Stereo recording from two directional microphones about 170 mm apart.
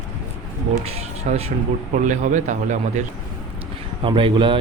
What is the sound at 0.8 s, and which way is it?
A man's voice, 35° right (ahead or behind).